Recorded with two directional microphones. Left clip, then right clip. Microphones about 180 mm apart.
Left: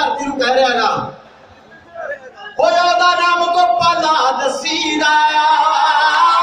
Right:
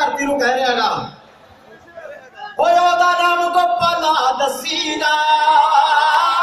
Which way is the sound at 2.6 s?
40° right (ahead or behind).